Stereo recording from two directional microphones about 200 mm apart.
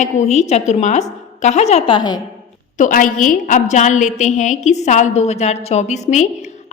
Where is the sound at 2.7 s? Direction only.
40° left (ahead or behind).